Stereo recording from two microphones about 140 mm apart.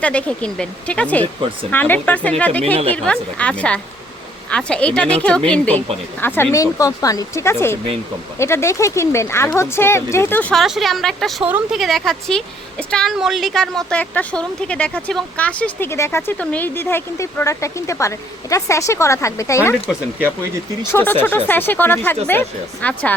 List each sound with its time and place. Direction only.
0.0 s a woman's voice: 10° left (ahead or behind)
10.5 s a woman's voice: centre (ahead or behind)
11.4 s speech: 10° right (ahead or behind)
11.8 s a woman's voice: centre (ahead or behind); by 19.7 s 20° left (ahead or behind)
20.9 s a woman's voice: 10° left (ahead or behind)